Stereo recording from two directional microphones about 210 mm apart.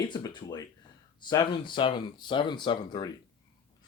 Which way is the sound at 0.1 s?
20° left (ahead or behind).